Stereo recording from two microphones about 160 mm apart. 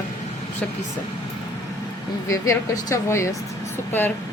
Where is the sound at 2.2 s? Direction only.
20° left (ahead or behind).